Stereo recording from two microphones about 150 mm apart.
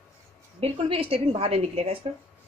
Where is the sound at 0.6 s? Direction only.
35° right (ahead or behind).